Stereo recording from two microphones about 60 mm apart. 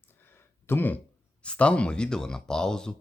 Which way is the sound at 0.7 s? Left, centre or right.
Left.